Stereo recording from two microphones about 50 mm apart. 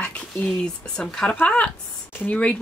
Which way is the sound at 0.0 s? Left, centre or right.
Left.